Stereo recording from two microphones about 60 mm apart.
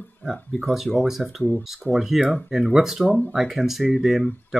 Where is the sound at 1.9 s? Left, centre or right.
Centre.